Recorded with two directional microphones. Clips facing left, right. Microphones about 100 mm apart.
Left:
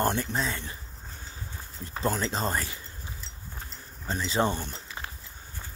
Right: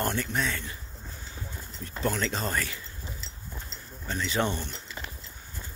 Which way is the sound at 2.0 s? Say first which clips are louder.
Left 1 dB; 30° left (ahead or behind).